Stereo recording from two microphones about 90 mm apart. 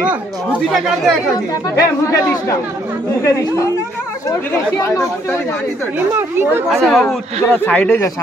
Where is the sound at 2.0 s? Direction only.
30° left (ahead or behind).